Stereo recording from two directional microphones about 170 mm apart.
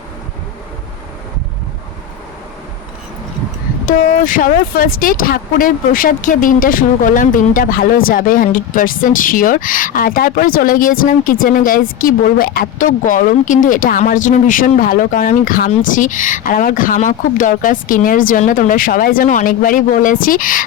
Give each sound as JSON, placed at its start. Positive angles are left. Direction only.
{"t": 3.8, "sound": "speech", "side_deg": 55}